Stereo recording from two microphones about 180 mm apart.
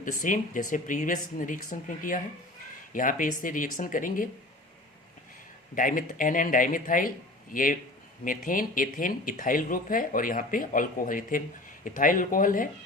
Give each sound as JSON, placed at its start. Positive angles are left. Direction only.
{"t": 0.0, "sound": "speech", "side_deg": 45}
{"t": 5.7, "sound": "speech", "side_deg": 50}